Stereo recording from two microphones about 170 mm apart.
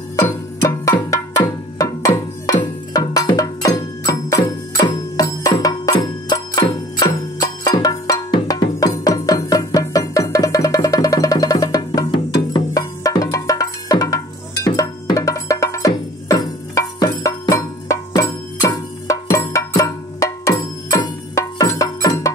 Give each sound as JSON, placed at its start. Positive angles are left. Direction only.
{"t": 0.1, "sound": "music", "side_deg": 20}